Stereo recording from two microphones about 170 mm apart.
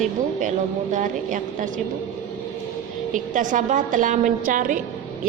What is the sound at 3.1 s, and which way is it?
A woman's voice, 50° right (ahead or behind).